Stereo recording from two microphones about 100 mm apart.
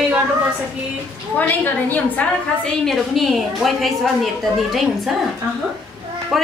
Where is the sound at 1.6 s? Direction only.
15° left (ahead or behind).